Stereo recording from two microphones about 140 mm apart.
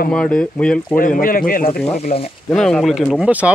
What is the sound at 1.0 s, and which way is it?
Speech, 85° left.